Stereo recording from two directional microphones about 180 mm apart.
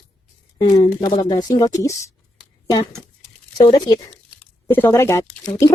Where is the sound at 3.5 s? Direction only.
25° left (ahead or behind).